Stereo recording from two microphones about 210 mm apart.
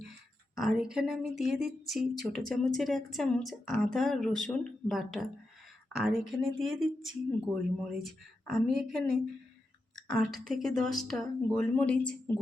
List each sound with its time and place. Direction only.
0.5 s speech: centre (ahead or behind)
10.2 s a woman's voice: 45° right (ahead or behind)
10.5 s speech: centre (ahead or behind)